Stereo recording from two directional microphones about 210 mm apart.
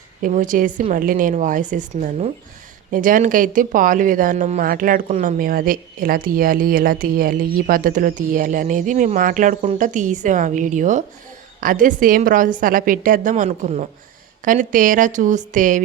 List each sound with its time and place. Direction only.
0.2 s speech: 40° right (ahead or behind)